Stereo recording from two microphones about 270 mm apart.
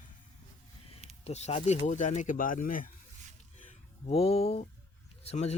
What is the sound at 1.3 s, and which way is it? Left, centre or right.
Speech, left.